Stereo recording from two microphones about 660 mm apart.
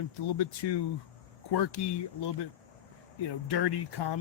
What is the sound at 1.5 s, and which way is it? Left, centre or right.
Speech, left.